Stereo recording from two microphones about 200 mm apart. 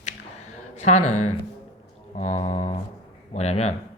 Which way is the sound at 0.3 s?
35° left (ahead or behind).